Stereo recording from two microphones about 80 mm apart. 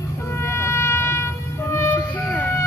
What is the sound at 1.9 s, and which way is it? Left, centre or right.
Vehicle, centre.